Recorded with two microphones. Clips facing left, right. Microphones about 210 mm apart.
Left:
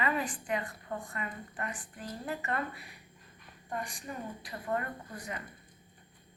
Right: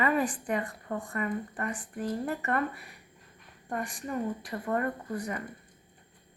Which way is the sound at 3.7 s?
55° right (ahead or behind).